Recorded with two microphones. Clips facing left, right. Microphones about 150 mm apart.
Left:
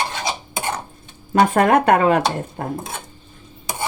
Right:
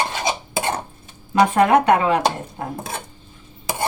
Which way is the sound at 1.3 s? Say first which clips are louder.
Even; 50° left (ahead or behind).